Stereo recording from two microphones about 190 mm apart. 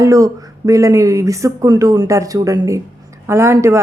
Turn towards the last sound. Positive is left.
turn(degrees=-15)  # may be behind; listen again after turning